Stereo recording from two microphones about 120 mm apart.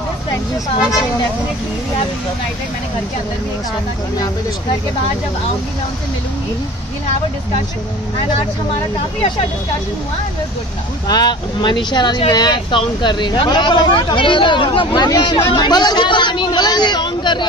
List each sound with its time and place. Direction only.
11.1 s speech: 35° left (ahead or behind)
15.0 s speech: 30° left (ahead or behind)